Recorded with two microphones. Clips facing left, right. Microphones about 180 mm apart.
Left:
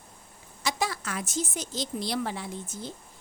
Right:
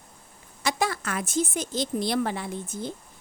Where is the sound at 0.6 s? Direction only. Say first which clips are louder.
Right 3 dB; 55° right (ahead or behind).